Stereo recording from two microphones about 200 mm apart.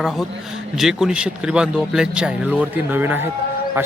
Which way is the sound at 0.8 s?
Centre (ahead or behind).